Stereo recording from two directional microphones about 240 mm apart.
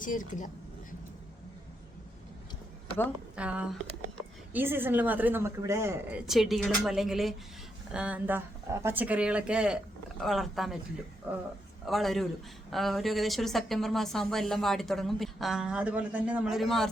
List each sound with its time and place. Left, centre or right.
0.0 s speech: left
3.3 s a woman's voice: centre
11.9 s speech: centre